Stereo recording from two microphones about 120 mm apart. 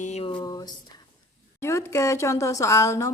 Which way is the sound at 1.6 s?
25° left (ahead or behind).